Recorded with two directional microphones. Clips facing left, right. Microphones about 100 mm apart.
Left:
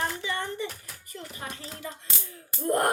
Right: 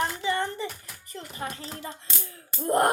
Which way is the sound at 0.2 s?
35° right (ahead or behind).